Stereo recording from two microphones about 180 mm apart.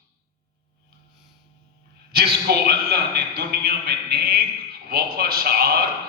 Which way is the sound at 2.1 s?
60° right (ahead or behind).